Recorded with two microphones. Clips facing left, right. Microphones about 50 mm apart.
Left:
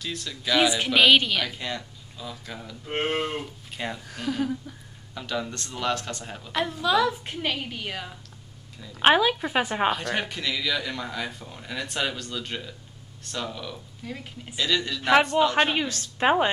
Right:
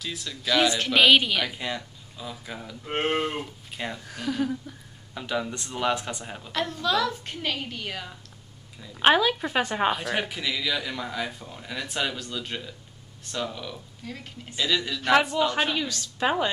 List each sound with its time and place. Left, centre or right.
0.0 s speech: centre
0.9 s speech: centre
5.1 s speech: centre
6.5 s a woman's voice: centre
9.8 s speech: centre
15.0 s a woman's voice: centre
15.6 s a woman's voice: left